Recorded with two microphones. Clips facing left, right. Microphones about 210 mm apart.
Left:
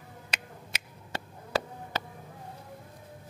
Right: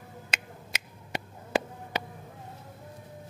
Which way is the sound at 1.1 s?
15° right (ahead or behind).